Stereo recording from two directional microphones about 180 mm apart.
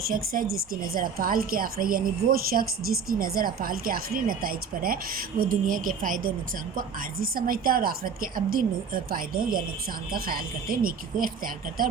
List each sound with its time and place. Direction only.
0.0 s a woman's voice: 55° right (ahead or behind)